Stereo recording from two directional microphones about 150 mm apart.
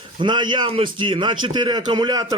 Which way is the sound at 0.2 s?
30° right (ahead or behind).